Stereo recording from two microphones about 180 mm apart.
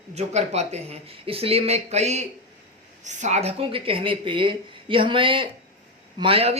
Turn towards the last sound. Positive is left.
turn(degrees=-35)  # may be behind; listen again after turning